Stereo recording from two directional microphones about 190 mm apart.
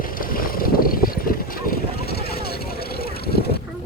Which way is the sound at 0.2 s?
50° left (ahead or behind).